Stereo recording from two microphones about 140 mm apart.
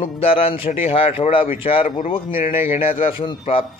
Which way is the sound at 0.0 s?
45° left (ahead or behind).